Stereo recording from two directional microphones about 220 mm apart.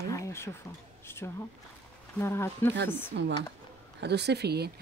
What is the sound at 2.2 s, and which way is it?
Speech, 10° left (ahead or behind).